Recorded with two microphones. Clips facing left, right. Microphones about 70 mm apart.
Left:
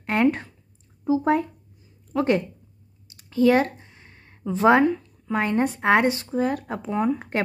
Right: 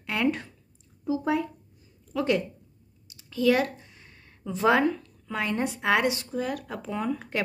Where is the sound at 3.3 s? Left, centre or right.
Left.